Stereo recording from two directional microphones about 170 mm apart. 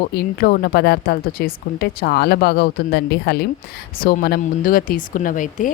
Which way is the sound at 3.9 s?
65° left (ahead or behind).